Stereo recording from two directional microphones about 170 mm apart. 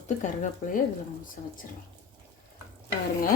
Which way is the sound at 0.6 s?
55° left (ahead or behind).